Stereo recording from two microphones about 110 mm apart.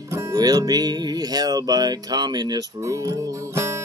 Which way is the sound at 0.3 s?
35° right (ahead or behind).